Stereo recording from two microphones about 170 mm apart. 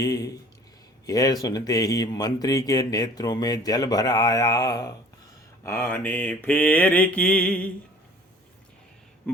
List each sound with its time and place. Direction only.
0.0 s speech: 20° left (ahead or behind)
5.6 s mantra: 15° left (ahead or behind)